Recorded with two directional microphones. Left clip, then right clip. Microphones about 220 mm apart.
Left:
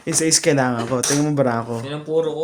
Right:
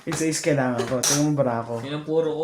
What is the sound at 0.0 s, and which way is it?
A man's voice, 55° left (ahead or behind).